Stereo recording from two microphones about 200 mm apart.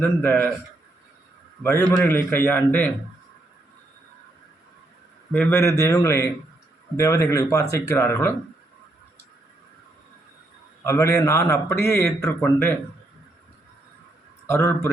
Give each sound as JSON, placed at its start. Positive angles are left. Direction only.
{"t": 0.0, "sound": "a man's voice", "side_deg": 10}
{"t": 1.6, "sound": "a man's voice", "side_deg": 10}
{"t": 5.3, "sound": "a man's voice", "side_deg": 10}
{"t": 10.8, "sound": "a man's voice", "side_deg": 15}
{"t": 14.4, "sound": "a man's voice", "side_deg": 15}